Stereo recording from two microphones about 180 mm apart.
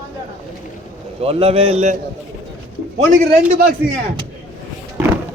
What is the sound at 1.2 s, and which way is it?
Speech, 35° right (ahead or behind).